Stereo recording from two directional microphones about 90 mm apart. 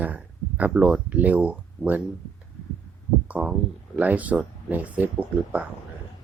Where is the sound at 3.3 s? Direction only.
15° right (ahead or behind).